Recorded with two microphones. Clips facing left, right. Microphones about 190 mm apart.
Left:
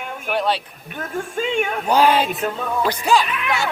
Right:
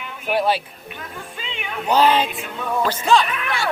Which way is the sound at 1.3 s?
45° left (ahead or behind).